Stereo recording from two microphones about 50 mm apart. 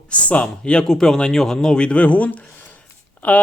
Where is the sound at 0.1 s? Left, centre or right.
Left.